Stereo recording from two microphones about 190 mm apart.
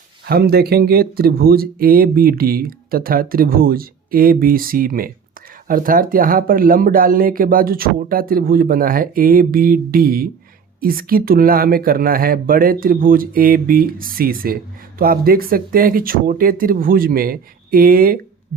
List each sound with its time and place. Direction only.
0.3 s speech: 55° right (ahead or behind)